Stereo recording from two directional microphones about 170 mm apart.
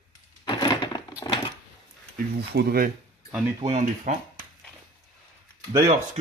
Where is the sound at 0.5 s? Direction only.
25° left (ahead or behind).